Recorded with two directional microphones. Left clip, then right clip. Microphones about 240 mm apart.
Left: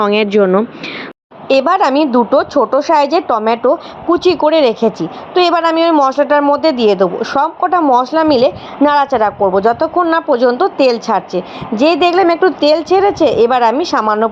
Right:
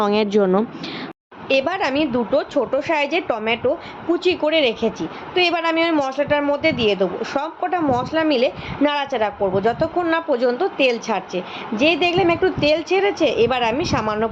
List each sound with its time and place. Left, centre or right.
0.0 s a woman's voice: centre